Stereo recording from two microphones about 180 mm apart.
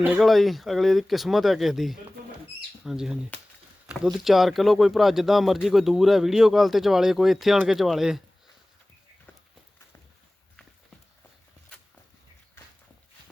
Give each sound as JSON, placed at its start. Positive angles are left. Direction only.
{"t": 0.0, "sound": "speech", "side_deg": -5}